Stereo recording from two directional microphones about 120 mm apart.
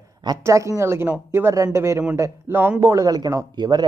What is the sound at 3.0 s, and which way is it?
Speech, 35° right (ahead or behind).